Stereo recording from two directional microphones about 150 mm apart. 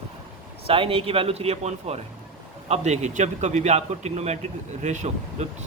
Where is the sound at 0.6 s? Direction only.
40° right (ahead or behind).